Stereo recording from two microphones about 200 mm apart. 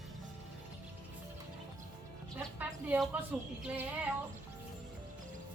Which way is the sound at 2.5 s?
10° right (ahead or behind).